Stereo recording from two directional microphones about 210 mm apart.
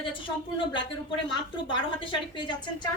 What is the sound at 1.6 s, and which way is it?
Speech, 25° left (ahead or behind).